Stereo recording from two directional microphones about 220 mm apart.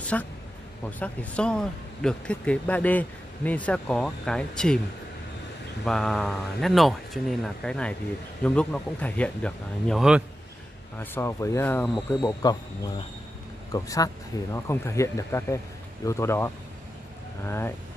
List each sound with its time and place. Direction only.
0.0 s a woman's voice: 5° left (ahead or behind)
5.9 s speech: centre (ahead or behind)
11.0 s speech: 10° left (ahead or behind)
12.2 s speech: 20° left (ahead or behind)